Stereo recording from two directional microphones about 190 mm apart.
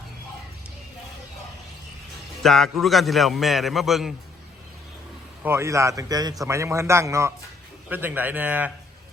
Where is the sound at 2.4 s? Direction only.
Centre (ahead or behind).